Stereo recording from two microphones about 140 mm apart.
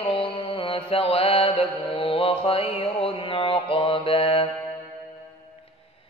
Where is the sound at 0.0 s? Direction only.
40° left (ahead or behind).